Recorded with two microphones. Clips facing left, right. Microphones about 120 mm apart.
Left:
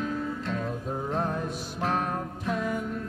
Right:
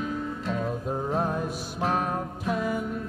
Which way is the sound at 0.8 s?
25° right (ahead or behind).